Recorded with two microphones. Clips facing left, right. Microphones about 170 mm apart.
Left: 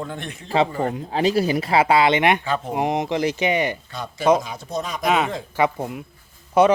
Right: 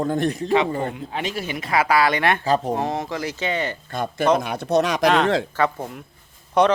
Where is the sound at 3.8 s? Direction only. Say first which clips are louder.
Right 6 dB; 55° right (ahead or behind).